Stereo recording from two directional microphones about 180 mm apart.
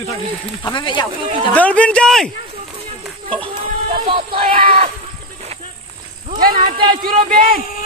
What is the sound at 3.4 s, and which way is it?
Speech, 30° right (ahead or behind).